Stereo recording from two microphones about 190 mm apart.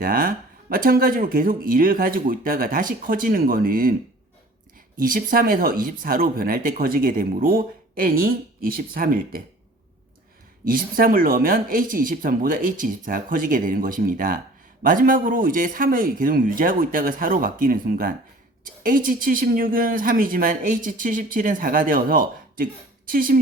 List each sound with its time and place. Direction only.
0.0 s speech: 45° right (ahead or behind)
4.9 s speech: 45° right (ahead or behind)
10.7 s speech: 50° right (ahead or behind)